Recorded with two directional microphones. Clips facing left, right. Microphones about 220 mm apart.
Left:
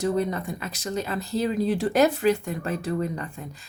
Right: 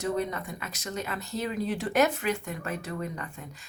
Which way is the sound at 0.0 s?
30° left (ahead or behind).